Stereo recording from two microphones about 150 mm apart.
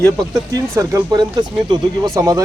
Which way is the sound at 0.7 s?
25° right (ahead or behind).